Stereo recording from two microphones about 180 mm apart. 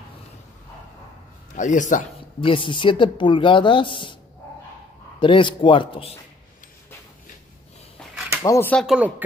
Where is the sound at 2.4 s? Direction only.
30° left (ahead or behind).